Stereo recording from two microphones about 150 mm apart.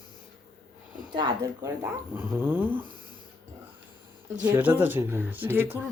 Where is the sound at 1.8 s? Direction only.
15° right (ahead or behind).